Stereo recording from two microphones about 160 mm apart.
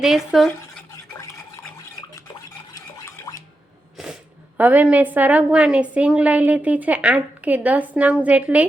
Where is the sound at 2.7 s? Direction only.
20° left (ahead or behind).